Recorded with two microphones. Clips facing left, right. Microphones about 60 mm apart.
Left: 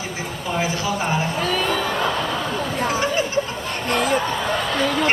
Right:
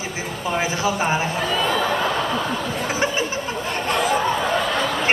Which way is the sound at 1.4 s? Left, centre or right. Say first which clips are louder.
Even; left.